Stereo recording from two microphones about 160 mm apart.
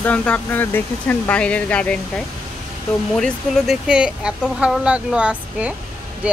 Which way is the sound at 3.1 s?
5° left (ahead or behind).